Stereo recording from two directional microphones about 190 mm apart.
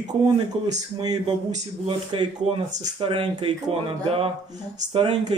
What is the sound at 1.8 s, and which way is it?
Speech, 25° right (ahead or behind).